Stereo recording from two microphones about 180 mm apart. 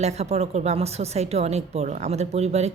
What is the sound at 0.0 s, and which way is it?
Speech, 40° right (ahead or behind).